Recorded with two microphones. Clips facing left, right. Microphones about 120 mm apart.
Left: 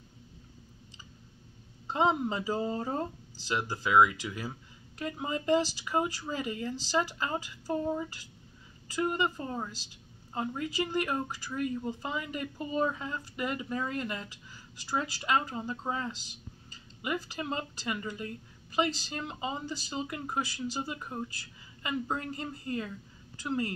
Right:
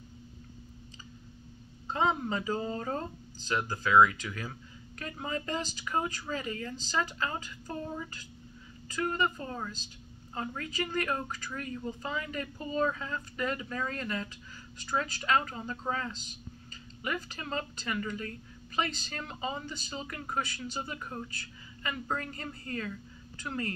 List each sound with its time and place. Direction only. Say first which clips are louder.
1.9 s a woman's voice: left 2 dB; 20° left (ahead or behind)
8.9 s a woman's voice: left 1 dB; 20° left (ahead or behind)